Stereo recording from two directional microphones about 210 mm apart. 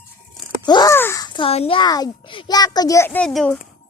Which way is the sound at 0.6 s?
20° left (ahead or behind).